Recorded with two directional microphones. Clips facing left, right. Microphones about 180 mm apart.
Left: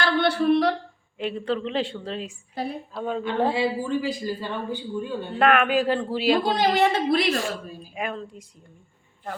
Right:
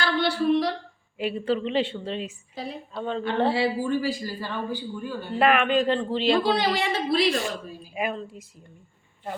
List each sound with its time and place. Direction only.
0.0 s a sound: 60° left (ahead or behind)
1.2 s a woman's voice: 5° right (ahead or behind); by 5.1 s 20° left (ahead or behind)
5.4 s a man's voice: centre (ahead or behind)
6.4 s a woman's voice: 45° left (ahead or behind)
7.9 s a woman's voice: 5° right (ahead or behind)